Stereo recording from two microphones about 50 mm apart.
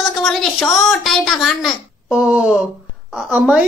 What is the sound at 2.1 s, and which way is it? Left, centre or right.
Speech, right.